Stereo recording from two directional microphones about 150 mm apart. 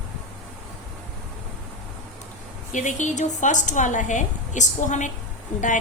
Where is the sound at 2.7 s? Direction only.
55° left (ahead or behind).